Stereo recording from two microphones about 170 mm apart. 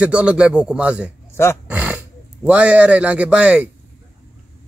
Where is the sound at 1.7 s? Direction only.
5° right (ahead or behind).